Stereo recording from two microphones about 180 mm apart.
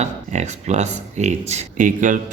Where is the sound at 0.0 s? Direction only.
40° right (ahead or behind).